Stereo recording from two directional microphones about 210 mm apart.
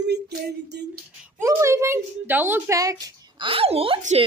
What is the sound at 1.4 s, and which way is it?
Speech, 15° right (ahead or behind).